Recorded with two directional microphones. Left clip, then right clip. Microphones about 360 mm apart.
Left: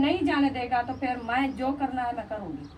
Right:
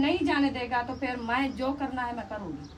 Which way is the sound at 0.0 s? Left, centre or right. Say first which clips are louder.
Left 1 dB; centre.